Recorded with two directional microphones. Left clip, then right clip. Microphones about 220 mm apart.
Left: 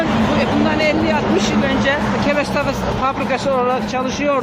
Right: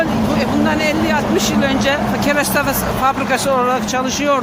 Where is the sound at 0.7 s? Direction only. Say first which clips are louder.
Even; 50° right (ahead or behind).